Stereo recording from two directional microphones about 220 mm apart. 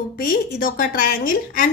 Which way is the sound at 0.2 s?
40° left (ahead or behind).